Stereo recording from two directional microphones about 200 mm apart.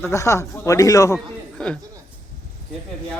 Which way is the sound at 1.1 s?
5° left (ahead or behind).